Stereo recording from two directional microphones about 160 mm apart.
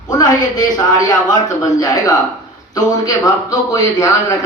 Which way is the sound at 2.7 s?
20° left (ahead or behind).